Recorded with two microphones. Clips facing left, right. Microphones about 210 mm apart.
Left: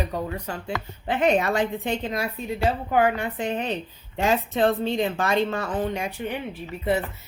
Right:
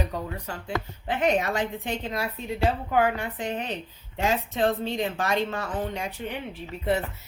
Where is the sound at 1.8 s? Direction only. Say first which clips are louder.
Left 3 dB; 15° left (ahead or behind).